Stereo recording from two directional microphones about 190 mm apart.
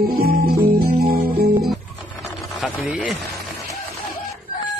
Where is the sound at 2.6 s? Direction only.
5° right (ahead or behind).